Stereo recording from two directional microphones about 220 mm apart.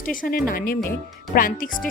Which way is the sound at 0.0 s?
40° left (ahead or behind).